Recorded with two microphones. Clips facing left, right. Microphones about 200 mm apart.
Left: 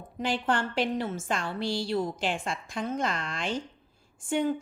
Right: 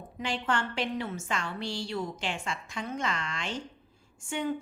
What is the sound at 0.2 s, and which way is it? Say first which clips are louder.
A woman's voice: left 3 dB; 35° left (ahead or behind).